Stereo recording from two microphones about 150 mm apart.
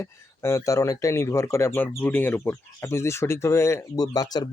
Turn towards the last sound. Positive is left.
turn(degrees=25)  # may be behind; listen again after turning